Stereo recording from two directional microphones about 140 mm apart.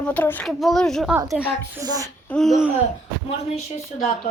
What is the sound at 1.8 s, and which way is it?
Speech, 25° right (ahead or behind).